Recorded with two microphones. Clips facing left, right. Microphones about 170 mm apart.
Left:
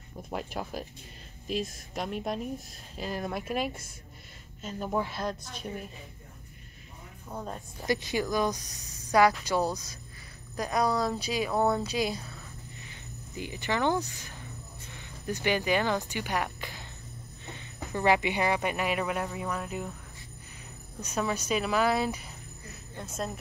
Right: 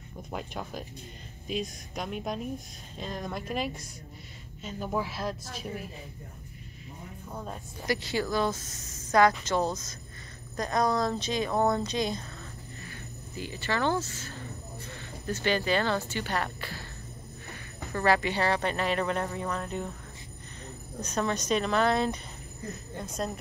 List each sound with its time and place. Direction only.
0.3 s a woman's voice: 5° left (ahead or behind)
7.8 s speech: 20° left (ahead or behind)
12.8 s speech: 20° left (ahead or behind)
17.9 s speech: 15° left (ahead or behind)
21.0 s a woman's voice: 10° left (ahead or behind)